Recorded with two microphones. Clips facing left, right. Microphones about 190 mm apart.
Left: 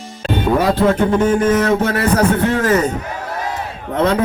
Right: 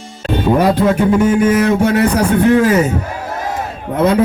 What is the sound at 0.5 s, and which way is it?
A man's voice, 15° right (ahead or behind).